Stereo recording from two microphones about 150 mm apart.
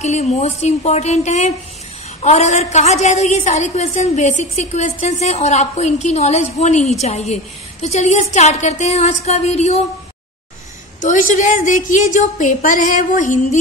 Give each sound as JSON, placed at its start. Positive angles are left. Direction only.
{"t": 0.0, "sound": "a woman's voice", "side_deg": 50}
{"t": 11.0, "sound": "a woman's voice", "side_deg": 60}